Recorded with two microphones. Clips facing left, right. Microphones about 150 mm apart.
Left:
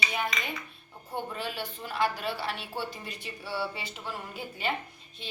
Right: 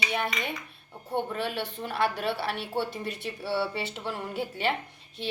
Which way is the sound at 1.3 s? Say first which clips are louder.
Right 4 dB; 65° right (ahead or behind).